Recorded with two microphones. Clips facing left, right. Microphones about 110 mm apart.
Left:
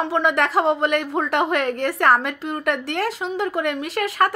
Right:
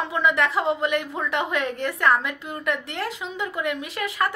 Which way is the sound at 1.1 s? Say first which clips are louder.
Left 5 dB; 40° left (ahead or behind).